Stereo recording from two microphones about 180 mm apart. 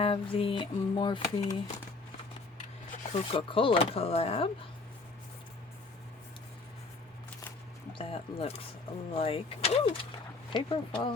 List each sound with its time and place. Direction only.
0.0 s speech: 30° left (ahead or behind)
3.1 s speech: 30° left (ahead or behind)
7.9 s speech: 30° left (ahead or behind)